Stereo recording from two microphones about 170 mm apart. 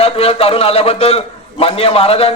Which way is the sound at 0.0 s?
35° left (ahead or behind).